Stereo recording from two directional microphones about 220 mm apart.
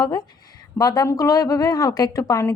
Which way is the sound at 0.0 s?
15° left (ahead or behind).